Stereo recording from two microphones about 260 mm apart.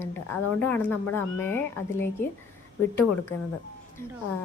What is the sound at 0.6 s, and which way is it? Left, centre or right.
Speech, centre.